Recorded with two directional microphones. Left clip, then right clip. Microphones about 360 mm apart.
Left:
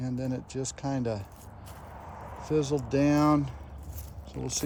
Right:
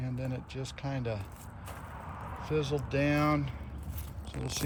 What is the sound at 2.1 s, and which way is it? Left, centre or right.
Speech, centre.